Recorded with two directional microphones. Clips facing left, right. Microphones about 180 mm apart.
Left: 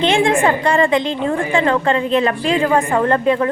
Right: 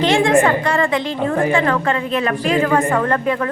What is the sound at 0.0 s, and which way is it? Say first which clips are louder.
A woman's voice: right 1 dB; 25° left (ahead or behind).